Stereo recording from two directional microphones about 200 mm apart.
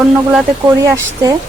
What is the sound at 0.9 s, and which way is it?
Speech, 15° right (ahead or behind).